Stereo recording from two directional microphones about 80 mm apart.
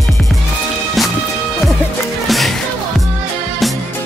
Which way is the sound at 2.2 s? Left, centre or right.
Centre.